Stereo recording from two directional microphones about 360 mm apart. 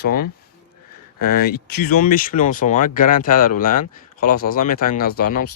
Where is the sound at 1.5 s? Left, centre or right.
Left.